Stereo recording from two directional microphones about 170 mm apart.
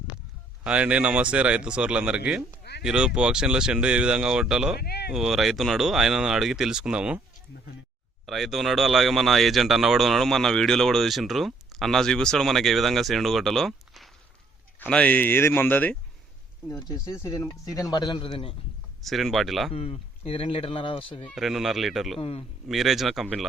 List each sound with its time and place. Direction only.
0.6 s speech: 5° right (ahead or behind)
4.8 s speech: 70° left (ahead or behind)
5.1 s speech: centre (ahead or behind)
8.3 s speech: centre (ahead or behind); by 18.5 s 35° left (ahead or behind)
19.0 s speech: centre (ahead or behind)
19.7 s speech: 35° left (ahead or behind)
21.2 s speech: centre (ahead or behind)
22.2 s speech: 35° left (ahead or behind)
22.7 s speech: centre (ahead or behind)